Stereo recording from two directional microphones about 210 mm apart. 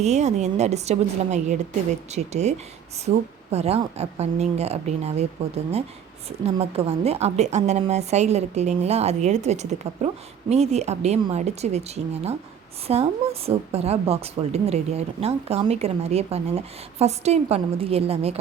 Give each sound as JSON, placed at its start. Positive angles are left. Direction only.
{"t": 0.0, "sound": "a woman's voice", "side_deg": -30}
{"t": 6.4, "sound": "a woman's voice", "side_deg": -30}